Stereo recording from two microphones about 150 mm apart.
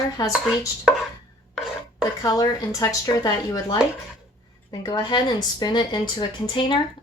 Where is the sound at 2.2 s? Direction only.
25° left (ahead or behind).